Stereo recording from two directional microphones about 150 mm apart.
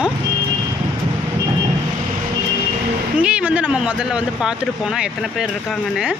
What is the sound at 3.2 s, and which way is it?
Speech, 10° right (ahead or behind).